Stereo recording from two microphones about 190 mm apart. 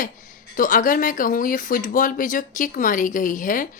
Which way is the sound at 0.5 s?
45° left (ahead or behind).